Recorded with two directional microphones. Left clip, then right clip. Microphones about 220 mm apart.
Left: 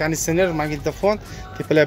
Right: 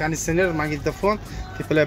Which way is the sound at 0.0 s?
25° left (ahead or behind).